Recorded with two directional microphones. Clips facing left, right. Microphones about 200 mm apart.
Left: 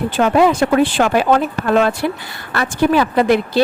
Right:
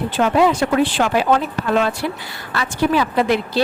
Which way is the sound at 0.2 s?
50° left (ahead or behind).